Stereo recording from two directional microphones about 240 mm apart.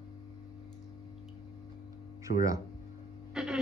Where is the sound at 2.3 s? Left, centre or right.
Left.